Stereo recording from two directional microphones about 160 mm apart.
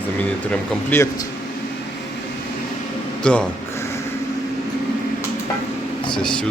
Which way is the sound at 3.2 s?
5° left (ahead or behind).